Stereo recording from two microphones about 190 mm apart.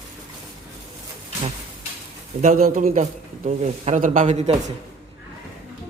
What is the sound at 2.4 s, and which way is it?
A man's voice, 45° right (ahead or behind).